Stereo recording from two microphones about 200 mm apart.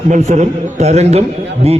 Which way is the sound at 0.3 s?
35° right (ahead or behind).